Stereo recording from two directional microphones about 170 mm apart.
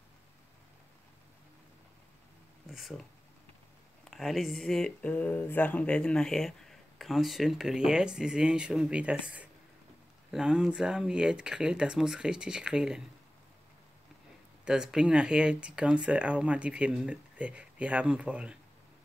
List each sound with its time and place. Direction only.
2.6 s speech: centre (ahead or behind)
4.1 s speech: centre (ahead or behind)
14.6 s speech: 5° right (ahead or behind)